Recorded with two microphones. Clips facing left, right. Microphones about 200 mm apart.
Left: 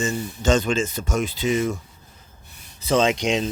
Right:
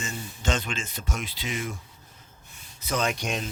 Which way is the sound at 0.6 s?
45° left (ahead or behind).